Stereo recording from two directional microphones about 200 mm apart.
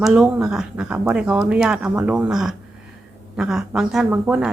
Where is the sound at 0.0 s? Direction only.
5° right (ahead or behind).